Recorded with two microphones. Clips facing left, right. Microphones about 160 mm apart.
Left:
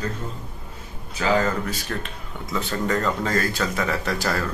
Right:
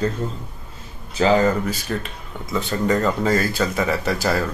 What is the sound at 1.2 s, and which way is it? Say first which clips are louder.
Speech: right 6 dB; 30° right (ahead or behind).